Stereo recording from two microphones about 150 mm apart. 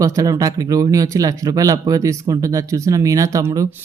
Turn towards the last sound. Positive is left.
turn(degrees=-20)  # may be behind; listen again after turning